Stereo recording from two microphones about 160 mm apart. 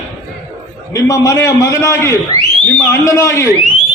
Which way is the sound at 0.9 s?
20° left (ahead or behind).